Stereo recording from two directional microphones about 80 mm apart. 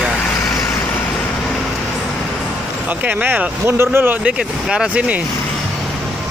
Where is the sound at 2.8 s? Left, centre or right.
Right.